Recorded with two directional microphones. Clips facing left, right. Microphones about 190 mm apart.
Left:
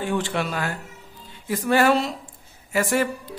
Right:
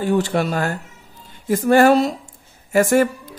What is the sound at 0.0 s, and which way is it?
A man's voice, 40° right (ahead or behind).